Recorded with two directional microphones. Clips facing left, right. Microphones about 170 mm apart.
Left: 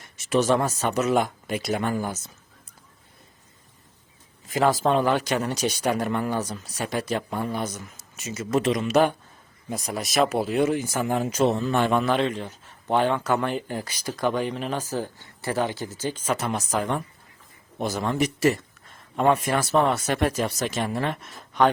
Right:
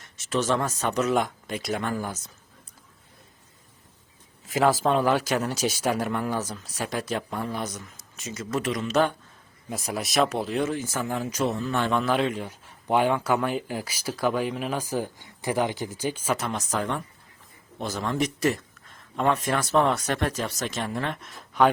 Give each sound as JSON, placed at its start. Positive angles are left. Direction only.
{"t": 0.0, "sound": "speech", "side_deg": 10}
{"t": 4.4, "sound": "speech", "side_deg": 0}
{"t": 8.4, "sound": "speech", "side_deg": 20}
{"t": 9.6, "sound": "speech", "side_deg": 0}
{"t": 11.9, "sound": "speech", "side_deg": 0}
{"t": 16.5, "sound": "speech", "side_deg": 10}